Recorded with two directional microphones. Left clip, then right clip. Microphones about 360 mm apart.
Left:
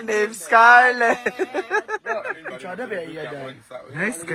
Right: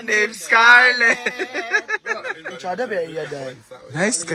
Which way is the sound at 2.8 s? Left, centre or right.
Right.